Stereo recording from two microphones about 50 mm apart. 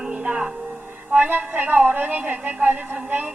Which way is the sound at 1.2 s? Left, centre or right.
Right.